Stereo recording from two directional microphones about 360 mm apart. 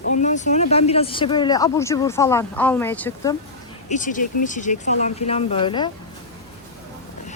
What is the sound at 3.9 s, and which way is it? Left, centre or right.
Speech, left.